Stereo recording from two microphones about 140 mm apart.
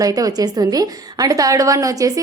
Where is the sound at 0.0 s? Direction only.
25° right (ahead or behind).